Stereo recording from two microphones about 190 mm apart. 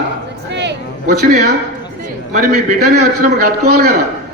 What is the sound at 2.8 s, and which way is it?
A man's voice, 60° right (ahead or behind).